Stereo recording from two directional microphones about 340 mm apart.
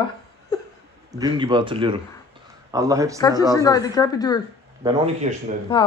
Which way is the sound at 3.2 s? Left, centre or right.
Centre.